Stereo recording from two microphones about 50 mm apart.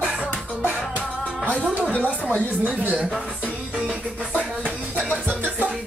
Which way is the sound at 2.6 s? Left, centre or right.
Right.